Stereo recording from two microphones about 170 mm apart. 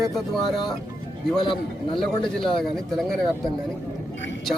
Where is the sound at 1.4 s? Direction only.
30° left (ahead or behind).